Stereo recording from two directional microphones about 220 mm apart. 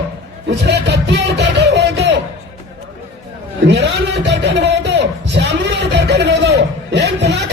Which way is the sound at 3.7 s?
50° right (ahead or behind).